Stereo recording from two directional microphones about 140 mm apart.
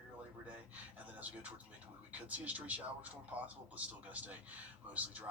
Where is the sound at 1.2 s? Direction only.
10° right (ahead or behind).